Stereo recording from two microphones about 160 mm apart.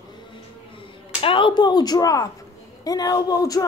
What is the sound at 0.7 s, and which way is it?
Speech, 35° left (ahead or behind).